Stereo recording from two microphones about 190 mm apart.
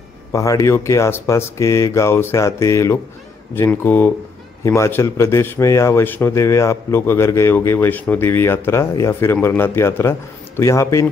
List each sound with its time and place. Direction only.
0.3 s a man's voice: 15° left (ahead or behind)